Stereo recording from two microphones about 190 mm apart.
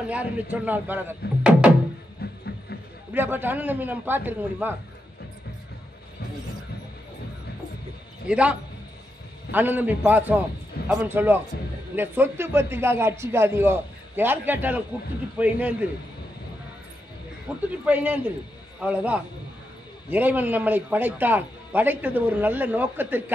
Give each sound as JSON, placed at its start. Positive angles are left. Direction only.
{"t": 0.1, "sound": "a man's voice", "side_deg": -10}
{"t": 2.2, "sound": "a sound", "side_deg": 55}
{"t": 3.1, "sound": "a man's voice", "side_deg": -10}
{"t": 8.3, "sound": "a man's voice", "side_deg": -5}
{"t": 17.5, "sound": "a man's voice", "side_deg": -5}